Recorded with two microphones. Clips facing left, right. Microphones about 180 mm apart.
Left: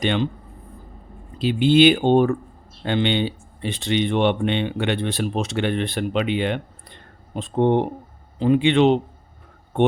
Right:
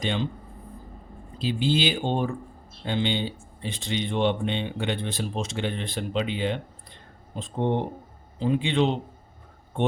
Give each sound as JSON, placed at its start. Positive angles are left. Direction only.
{"t": 0.0, "sound": "speech", "side_deg": 70}
{"t": 1.4, "sound": "speech", "side_deg": 65}